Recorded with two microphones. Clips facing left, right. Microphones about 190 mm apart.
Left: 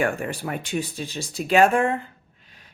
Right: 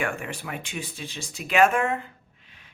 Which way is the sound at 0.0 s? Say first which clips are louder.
Left 6 dB; 40° left (ahead or behind).